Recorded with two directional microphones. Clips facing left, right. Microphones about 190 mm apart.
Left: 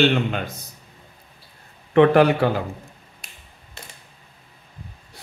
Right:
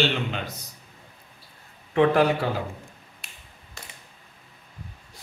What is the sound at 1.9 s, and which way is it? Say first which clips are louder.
Speech: left 5 dB; 65° left (ahead or behind).